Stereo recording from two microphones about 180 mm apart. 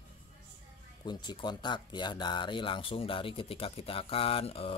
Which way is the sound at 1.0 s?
25° left (ahead or behind).